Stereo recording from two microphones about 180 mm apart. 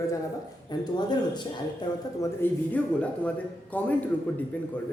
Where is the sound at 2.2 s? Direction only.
10° left (ahead or behind).